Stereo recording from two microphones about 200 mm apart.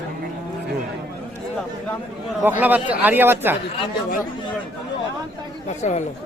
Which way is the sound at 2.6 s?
10° right (ahead or behind).